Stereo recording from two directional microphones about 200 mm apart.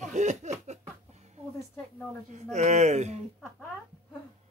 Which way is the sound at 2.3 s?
35° right (ahead or behind).